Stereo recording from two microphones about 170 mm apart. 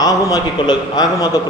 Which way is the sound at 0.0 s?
20° left (ahead or behind).